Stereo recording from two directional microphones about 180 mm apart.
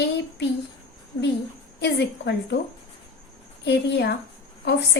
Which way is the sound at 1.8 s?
75° left (ahead or behind).